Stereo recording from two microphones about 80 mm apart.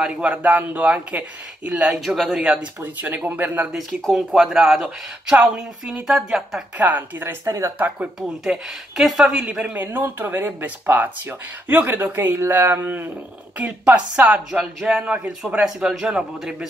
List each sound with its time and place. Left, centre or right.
0.0 s speech: centre
1.9 s speech: centre
2.8 s speech: right
3.7 s speech: centre
5.3 s speech: centre
6.8 s speech: right
7.4 s speech: right
8.5 s speech: centre
9.8 s speech: right
15.6 s speech: centre